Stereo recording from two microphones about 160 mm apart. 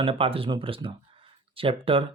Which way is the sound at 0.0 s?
35° right (ahead or behind).